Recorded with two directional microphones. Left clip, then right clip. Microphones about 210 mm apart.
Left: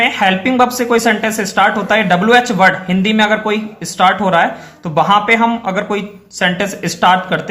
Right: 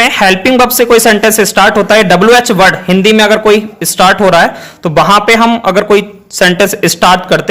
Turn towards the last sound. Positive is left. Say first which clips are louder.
# right 5 dB
turn(degrees=-50)  # may be behind; listen again after turning